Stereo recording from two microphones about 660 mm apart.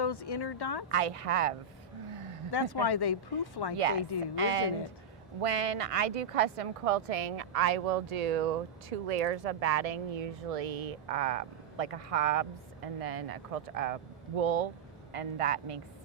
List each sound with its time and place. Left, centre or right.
0.0 s speech: left
0.9 s speech: right
2.5 s speech: left
4.4 s speech: right